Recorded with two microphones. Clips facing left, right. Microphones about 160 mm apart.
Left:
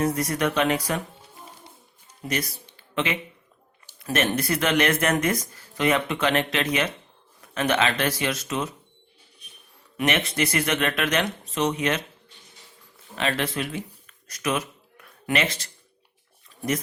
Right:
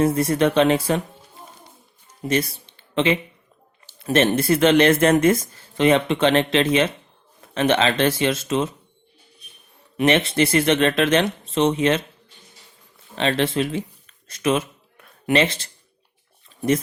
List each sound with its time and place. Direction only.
0.0 s speech: 30° right (ahead or behind)
2.2 s speech: 25° right (ahead or behind)
10.0 s speech: 30° right (ahead or behind)
13.1 s speech: 25° right (ahead or behind)